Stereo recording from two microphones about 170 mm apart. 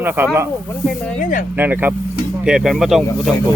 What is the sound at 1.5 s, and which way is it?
Speech, 10° right (ahead or behind).